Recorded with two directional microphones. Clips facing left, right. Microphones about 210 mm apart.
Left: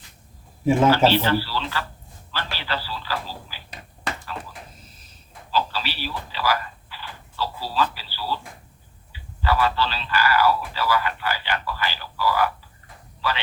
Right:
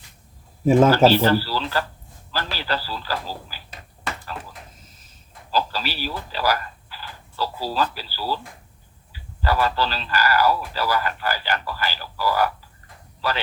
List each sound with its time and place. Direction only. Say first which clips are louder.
0.6 s speech: right 3 dB; 40° right (ahead or behind)
5.5 s speech: right 1 dB; 40° right (ahead or behind)
9.4 s speech: even; 40° right (ahead or behind)